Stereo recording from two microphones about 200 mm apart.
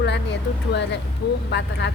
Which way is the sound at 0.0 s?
60° left (ahead or behind).